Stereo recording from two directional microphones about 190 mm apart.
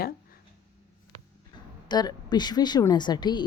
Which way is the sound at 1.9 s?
20° left (ahead or behind).